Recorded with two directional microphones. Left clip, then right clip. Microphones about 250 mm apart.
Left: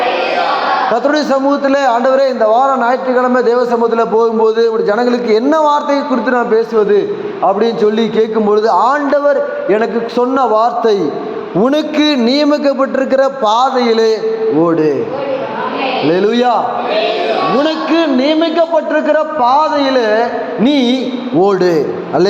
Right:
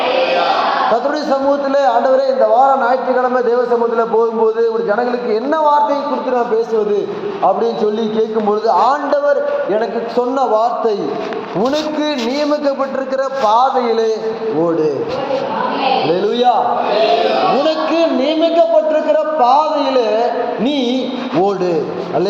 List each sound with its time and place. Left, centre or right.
1.1 s a man's voice: left
16.3 s a man's voice: left
17.6 s a sound: left
19.0 s a man's voice: left